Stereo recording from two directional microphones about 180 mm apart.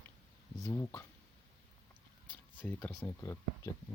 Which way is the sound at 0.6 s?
15° left (ahead or behind).